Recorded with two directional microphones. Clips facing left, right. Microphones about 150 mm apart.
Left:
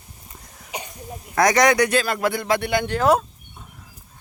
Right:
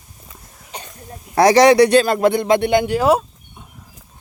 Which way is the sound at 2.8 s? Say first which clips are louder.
Right 3 dB; 10° right (ahead or behind).